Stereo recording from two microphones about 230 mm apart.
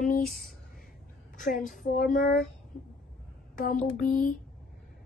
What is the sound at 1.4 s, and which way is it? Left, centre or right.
Speech, left.